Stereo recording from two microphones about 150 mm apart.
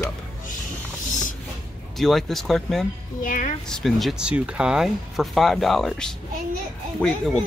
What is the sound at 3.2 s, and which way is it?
Speech, 60° left (ahead or behind).